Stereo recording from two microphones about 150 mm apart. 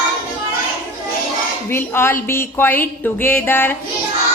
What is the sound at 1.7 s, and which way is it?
Speech, 15° left (ahead or behind).